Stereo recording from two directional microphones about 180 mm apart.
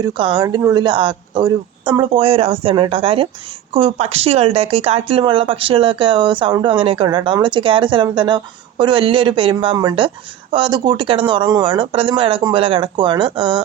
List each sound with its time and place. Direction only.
0.0 s speech: 25° right (ahead or behind)